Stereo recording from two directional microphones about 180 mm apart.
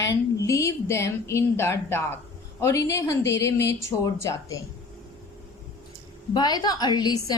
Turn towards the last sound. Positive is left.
turn(degrees=20)  # may be behind; listen again after turning